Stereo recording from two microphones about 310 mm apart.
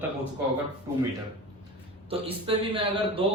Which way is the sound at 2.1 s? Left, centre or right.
Centre.